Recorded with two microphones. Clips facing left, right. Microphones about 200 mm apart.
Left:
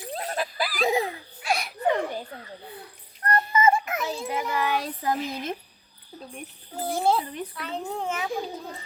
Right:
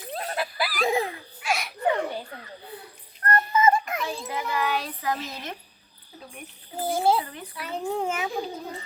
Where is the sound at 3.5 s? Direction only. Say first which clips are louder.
Right 1 dB; 10° left (ahead or behind).